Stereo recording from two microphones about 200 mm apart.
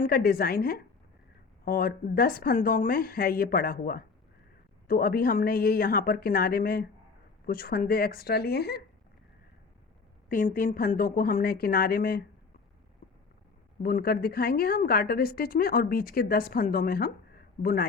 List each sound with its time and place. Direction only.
0.0 s a woman's voice: 45° left (ahead or behind)
10.2 s a woman's voice: 40° left (ahead or behind)
13.8 s a woman's voice: 50° left (ahead or behind)